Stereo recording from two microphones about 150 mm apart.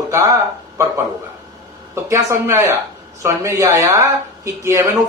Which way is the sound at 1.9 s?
20° right (ahead or behind).